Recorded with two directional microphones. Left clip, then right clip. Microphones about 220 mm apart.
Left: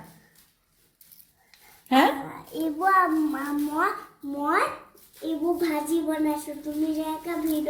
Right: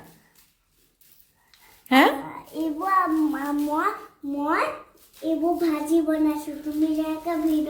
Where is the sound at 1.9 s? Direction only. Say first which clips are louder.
Right 2 dB; 20° right (ahead or behind).